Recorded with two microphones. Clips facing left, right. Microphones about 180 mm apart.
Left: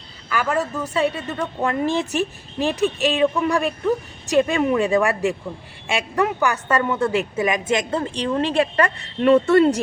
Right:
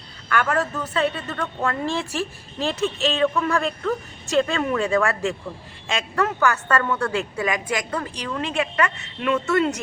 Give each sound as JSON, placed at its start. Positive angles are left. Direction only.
{"t": 0.3, "sound": "a woman's voice", "side_deg": 5}